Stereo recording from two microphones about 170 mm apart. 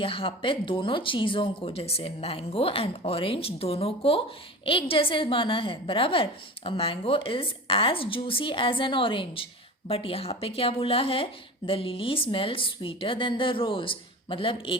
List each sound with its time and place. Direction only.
0.0 s speech: 30° left (ahead or behind)